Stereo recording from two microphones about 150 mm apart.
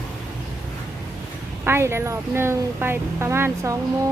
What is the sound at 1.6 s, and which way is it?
A woman's voice, 15° right (ahead or behind).